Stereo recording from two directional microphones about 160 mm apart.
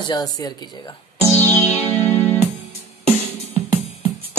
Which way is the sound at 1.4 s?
10° left (ahead or behind).